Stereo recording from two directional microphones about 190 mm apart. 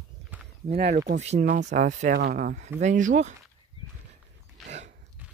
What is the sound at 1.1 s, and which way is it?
Speech, 35° right (ahead or behind).